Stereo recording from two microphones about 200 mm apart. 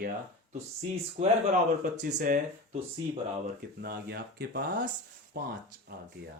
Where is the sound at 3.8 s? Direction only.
50° right (ahead or behind).